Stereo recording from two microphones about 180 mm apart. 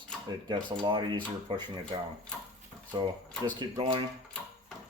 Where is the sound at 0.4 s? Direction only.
25° right (ahead or behind).